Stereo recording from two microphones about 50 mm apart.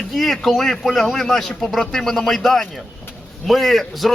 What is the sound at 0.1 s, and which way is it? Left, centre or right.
Speech, centre.